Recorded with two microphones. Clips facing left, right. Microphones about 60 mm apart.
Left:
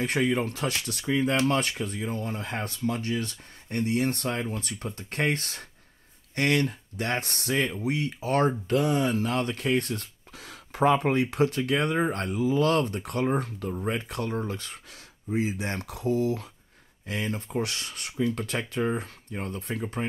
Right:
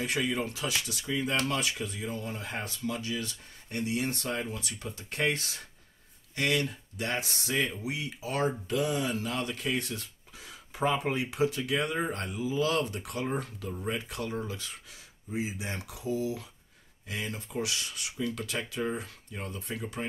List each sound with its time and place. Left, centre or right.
0.0 s speech: left
15.3 s speech: left